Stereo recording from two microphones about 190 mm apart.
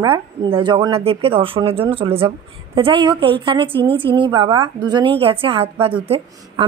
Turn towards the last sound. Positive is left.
turn(degrees=-30)  # may be behind; listen again after turning